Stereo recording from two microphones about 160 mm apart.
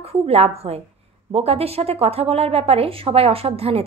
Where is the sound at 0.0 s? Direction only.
40° right (ahead or behind).